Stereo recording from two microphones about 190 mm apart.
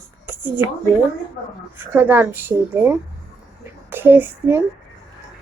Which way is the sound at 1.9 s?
10° right (ahead or behind).